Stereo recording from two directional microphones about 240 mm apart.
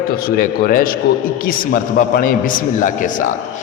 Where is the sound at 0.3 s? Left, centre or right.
Left.